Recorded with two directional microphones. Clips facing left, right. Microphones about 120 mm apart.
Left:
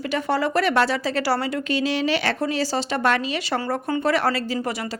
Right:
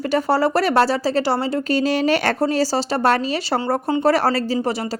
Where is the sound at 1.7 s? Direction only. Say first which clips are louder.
Right 5 dB; 45° right (ahead or behind).